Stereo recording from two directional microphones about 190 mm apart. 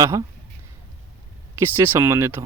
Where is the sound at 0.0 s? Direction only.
15° right (ahead or behind).